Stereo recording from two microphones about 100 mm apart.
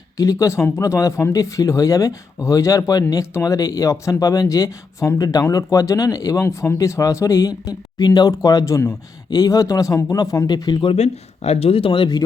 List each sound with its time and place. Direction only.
0.2 s speech: 35° left (ahead or behind)
10.8 s a man's voice: 90° left; by 12.2 s 50° left (ahead or behind)